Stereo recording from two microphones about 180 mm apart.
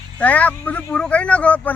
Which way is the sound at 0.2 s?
10° left (ahead or behind).